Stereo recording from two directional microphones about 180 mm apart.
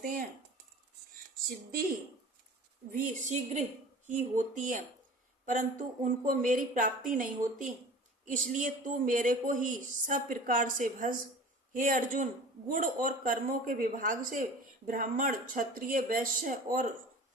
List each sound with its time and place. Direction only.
1.5 s speech: 55° right (ahead or behind)